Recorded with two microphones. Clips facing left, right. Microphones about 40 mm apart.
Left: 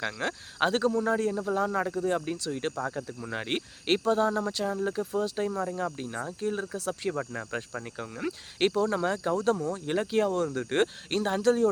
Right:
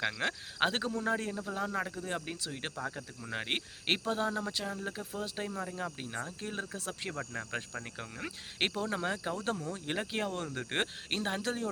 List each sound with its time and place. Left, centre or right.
0.2 s speech: right
0.6 s speech: centre
1.5 s speech: centre